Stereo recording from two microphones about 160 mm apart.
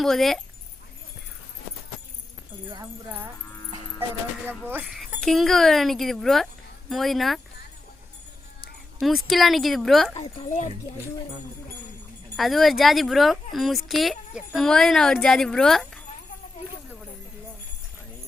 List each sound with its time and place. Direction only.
0.0 s speech: centre (ahead or behind)
4.4 s speech: 10° right (ahead or behind)
5.2 s speech: centre (ahead or behind)
9.0 s speech: centre (ahead or behind)
12.4 s speech: centre (ahead or behind)